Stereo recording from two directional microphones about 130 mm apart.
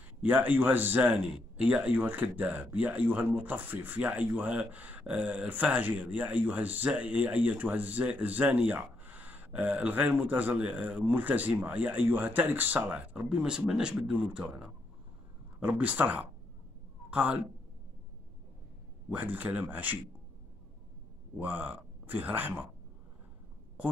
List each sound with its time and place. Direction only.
0.2 s a man's voice: 15° right (ahead or behind)
19.0 s a man's voice: 10° right (ahead or behind)
21.4 s a man's voice: 15° right (ahead or behind)